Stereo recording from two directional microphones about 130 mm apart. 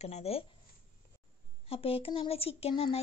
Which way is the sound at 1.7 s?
45° left (ahead or behind).